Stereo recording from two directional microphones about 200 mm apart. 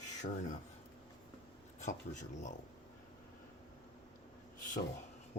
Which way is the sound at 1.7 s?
35° left (ahead or behind).